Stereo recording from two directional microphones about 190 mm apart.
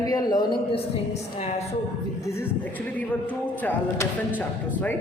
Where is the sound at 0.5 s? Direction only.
30° left (ahead or behind).